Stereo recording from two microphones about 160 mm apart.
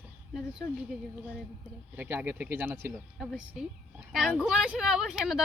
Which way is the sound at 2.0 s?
15° right (ahead or behind).